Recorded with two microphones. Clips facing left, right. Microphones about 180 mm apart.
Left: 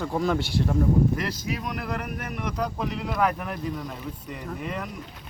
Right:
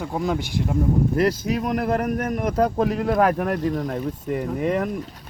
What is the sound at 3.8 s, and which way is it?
Speech, 55° right (ahead or behind).